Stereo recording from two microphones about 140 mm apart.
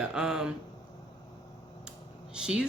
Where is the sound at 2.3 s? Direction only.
5° right (ahead or behind).